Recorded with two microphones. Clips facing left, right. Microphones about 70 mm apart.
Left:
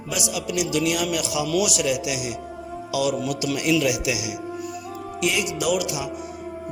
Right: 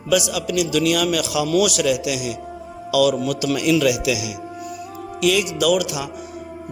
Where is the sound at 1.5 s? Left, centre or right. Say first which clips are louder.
Right 5 dB; right.